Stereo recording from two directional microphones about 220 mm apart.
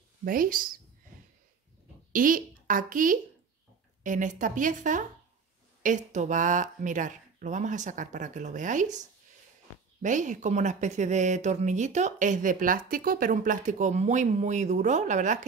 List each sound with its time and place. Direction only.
0.2 s speech: 40° right (ahead or behind)
2.1 s speech: 40° right (ahead or behind)
10.0 s speech: 35° right (ahead or behind)